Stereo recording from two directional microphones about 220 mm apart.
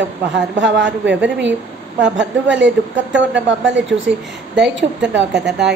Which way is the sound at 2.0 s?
55° right (ahead or behind).